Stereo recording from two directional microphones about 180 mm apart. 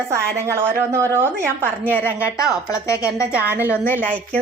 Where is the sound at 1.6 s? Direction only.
10° left (ahead or behind).